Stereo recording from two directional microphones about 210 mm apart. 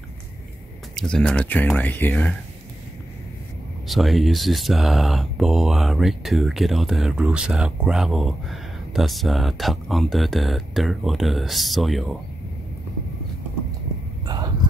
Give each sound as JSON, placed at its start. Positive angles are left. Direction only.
{"t": 0.9, "sound": "speech", "side_deg": 5}
{"t": 3.8, "sound": "speech", "side_deg": 0}
{"t": 14.2, "sound": "a sound", "side_deg": -20}